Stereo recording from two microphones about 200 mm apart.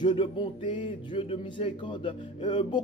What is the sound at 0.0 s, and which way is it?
Speech, 25° left (ahead or behind).